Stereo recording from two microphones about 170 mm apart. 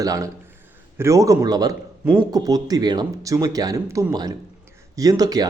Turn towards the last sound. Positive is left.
turn(degrees=-20)  # may be behind; listen again after turning